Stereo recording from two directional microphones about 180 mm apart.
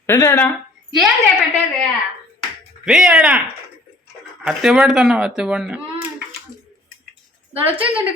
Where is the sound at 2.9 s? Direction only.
5° right (ahead or behind).